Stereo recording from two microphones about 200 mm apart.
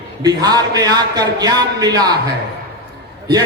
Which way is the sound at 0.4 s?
20° right (ahead or behind).